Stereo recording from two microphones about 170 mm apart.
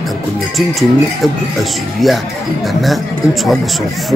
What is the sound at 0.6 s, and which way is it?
Speech, centre (ahead or behind).